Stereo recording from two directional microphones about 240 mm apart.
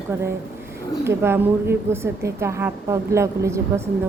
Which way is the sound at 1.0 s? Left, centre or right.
Centre.